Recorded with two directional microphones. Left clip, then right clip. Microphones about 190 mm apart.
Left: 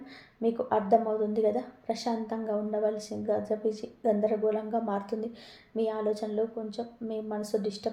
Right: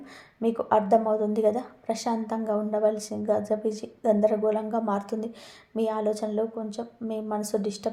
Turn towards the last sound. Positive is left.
turn(degrees=-30)  # may be behind; listen again after turning